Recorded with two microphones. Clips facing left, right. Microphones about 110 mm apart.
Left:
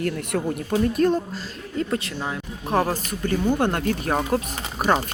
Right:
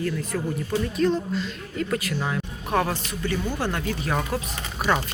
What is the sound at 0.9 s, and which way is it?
A woman's voice, 50° left (ahead or behind).